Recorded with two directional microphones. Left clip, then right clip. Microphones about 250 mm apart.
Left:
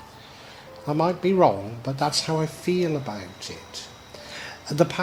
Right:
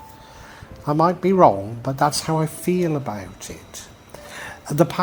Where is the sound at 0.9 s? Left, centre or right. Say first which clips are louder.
Right 4 dB; right.